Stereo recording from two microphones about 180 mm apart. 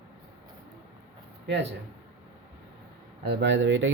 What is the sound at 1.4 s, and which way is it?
Speech, 75° right (ahead or behind).